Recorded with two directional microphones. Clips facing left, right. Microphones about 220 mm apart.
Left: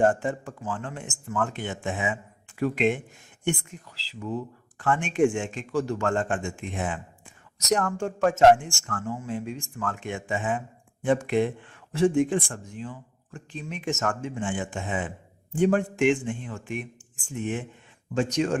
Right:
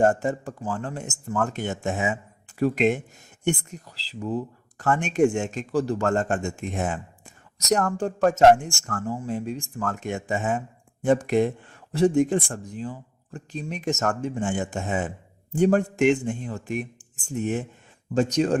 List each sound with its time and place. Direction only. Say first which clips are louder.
0.0 s speech: right 2 dB; 40° right (ahead or behind)